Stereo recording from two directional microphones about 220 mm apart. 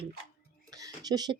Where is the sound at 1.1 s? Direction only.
20° right (ahead or behind).